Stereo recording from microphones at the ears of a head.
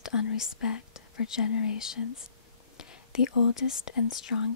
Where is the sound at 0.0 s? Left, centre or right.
Left.